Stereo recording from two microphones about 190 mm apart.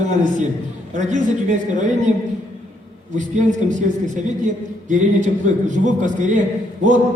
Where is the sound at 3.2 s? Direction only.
40° right (ahead or behind).